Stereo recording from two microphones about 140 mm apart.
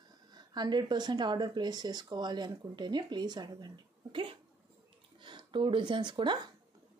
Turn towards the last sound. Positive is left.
turn(degrees=-35)  # may be behind; listen again after turning